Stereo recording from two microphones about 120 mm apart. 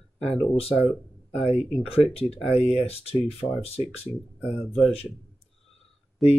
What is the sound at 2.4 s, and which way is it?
Speech, 55° left (ahead or behind).